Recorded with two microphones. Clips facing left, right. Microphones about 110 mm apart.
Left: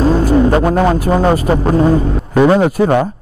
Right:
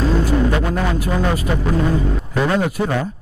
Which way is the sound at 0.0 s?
40° left (ahead or behind).